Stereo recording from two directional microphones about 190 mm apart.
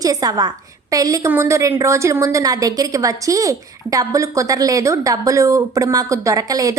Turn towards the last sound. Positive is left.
turn(degrees=-20)  # may be behind; listen again after turning